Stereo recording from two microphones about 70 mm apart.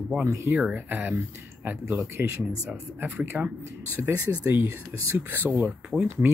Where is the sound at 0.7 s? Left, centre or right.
Right.